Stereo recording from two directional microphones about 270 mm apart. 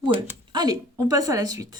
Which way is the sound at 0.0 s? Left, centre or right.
Centre.